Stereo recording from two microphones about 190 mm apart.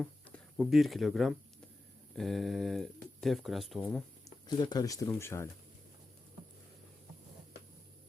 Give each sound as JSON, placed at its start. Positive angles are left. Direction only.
{"t": 0.0, "sound": "a sound", "side_deg": 5}
{"t": 0.5, "sound": "speech", "side_deg": 0}
{"t": 4.4, "sound": "speech", "side_deg": 20}